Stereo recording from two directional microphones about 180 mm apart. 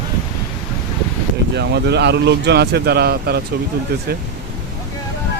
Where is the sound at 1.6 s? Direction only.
70° right (ahead or behind).